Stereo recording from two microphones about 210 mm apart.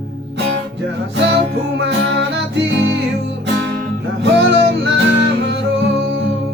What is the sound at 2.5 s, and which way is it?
Music, 55° right (ahead or behind).